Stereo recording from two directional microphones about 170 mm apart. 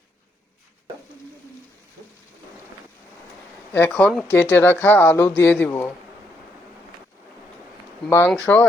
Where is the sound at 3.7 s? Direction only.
10° left (ahead or behind).